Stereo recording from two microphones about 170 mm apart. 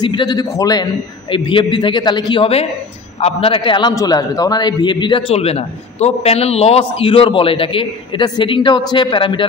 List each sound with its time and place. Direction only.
0.0 s a man's voice: 25° left (ahead or behind)